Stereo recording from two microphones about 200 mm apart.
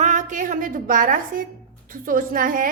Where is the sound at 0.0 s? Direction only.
40° right (ahead or behind).